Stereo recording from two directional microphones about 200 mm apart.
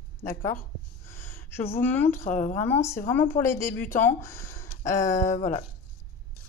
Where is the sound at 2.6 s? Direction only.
10° left (ahead or behind).